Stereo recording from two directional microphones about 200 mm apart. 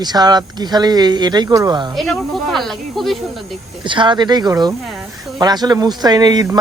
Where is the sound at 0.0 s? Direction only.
20° right (ahead or behind).